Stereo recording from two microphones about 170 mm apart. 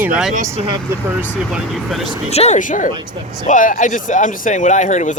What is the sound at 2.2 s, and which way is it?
Speech, 40° left (ahead or behind).